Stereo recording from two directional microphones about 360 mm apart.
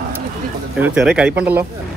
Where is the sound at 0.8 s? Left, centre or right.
Centre.